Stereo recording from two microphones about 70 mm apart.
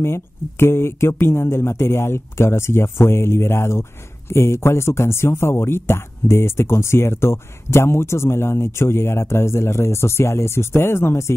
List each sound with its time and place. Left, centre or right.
0.0 s speech: left